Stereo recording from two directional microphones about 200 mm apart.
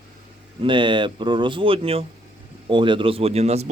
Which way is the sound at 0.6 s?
25° right (ahead or behind).